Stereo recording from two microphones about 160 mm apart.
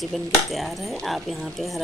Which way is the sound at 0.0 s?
Centre (ahead or behind).